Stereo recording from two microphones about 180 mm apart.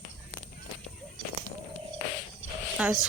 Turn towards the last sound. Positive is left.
turn(degrees=-5)  # may be behind; listen again after turning